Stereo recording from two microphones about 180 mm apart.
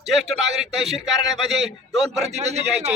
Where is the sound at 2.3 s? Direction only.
35° right (ahead or behind).